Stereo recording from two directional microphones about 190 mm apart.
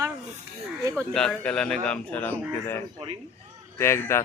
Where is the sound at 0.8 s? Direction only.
15° right (ahead or behind).